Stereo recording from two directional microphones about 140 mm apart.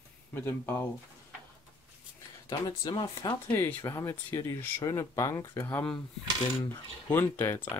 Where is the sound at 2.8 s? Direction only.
30° left (ahead or behind).